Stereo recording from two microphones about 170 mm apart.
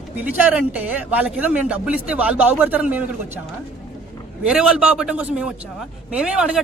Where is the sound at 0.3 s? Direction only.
10° right (ahead or behind).